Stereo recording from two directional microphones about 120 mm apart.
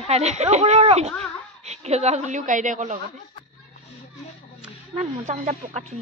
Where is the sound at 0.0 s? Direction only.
65° right (ahead or behind); by 3.0 s 85° right.